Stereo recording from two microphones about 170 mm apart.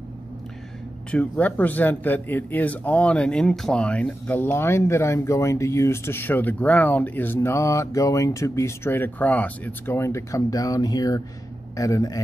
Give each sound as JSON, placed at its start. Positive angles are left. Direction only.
{"t": 1.1, "sound": "speech", "side_deg": 5}